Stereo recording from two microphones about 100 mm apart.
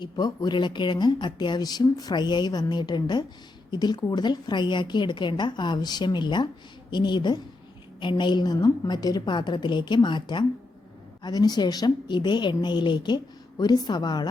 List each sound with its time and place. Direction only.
0.0 s speech: 45° left (ahead or behind)